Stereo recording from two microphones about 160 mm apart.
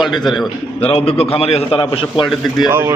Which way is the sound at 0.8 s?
35° left (ahead or behind).